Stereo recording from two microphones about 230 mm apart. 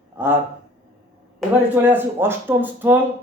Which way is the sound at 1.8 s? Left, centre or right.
Centre.